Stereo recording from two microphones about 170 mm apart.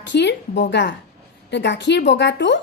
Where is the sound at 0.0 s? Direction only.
90° left.